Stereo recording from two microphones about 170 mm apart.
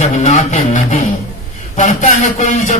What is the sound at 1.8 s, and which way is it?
A man's voice, 45° left (ahead or behind).